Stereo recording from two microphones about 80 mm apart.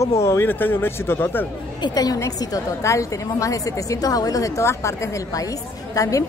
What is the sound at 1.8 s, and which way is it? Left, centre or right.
A woman's voice, left.